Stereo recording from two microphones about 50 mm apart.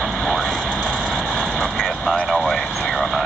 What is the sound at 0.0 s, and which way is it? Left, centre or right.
Vehicle, centre.